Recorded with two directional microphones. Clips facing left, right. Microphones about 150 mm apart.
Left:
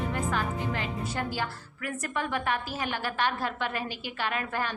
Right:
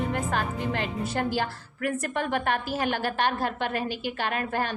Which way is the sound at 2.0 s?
60° right (ahead or behind).